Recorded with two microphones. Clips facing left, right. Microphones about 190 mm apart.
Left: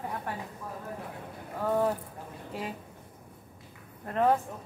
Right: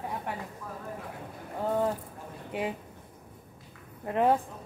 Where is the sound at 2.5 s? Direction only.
15° right (ahead or behind).